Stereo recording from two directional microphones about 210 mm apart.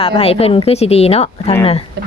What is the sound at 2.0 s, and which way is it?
Speech, 55° right (ahead or behind).